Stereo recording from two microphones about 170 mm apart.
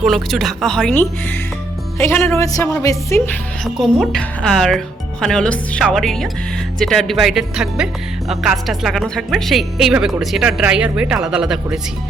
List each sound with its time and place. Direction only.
0.0 s a woman's voice: centre (ahead or behind); by 3.2 s 20° left (ahead or behind)
3.6 s a woman's voice: centre (ahead or behind)